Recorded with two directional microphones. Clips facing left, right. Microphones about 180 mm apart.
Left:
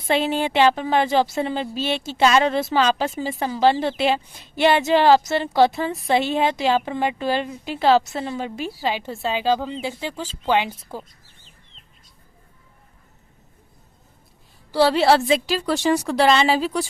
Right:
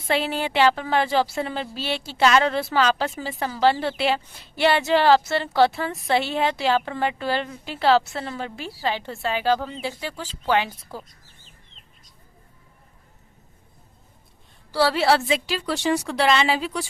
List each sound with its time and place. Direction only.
0.1 s a woman's voice: 20° left (ahead or behind)
14.7 s a woman's voice: 20° left (ahead or behind)